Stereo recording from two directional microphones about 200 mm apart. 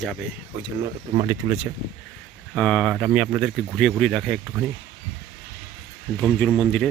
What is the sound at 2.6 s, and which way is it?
Speech, 5° left (ahead or behind).